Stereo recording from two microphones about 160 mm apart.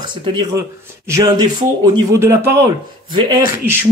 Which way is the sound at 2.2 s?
15° right (ahead or behind).